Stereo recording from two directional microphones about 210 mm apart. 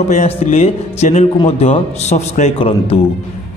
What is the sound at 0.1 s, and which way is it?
Speech, 30° left (ahead or behind).